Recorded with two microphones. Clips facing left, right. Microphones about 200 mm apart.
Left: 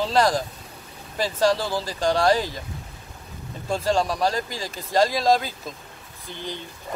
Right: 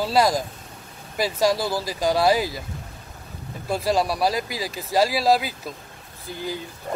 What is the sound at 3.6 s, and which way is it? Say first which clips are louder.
Speech: even; 10° right (ahead or behind).